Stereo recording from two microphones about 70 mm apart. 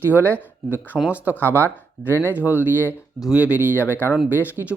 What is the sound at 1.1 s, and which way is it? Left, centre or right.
Speech, right.